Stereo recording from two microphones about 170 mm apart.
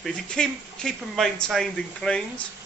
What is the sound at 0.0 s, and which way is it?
Speech, 5° left (ahead or behind).